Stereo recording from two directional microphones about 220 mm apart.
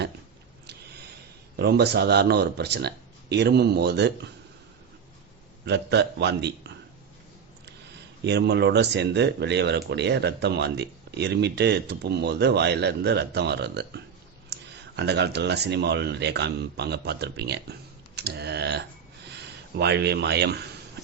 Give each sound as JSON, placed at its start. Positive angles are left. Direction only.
{"t": 1.5, "sound": "speech", "side_deg": -45}
{"t": 5.6, "sound": "speech", "side_deg": -50}
{"t": 8.2, "sound": "speech", "side_deg": -50}